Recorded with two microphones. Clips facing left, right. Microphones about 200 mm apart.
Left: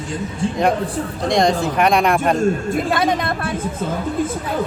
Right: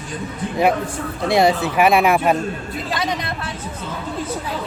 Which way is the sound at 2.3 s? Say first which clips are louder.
Left 7 dB; 50° left (ahead or behind).